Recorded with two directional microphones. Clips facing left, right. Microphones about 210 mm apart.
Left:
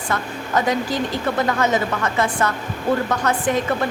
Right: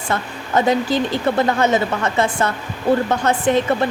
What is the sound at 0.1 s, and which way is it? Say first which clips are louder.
Speech: right 2 dB; 25° right (ahead or behind).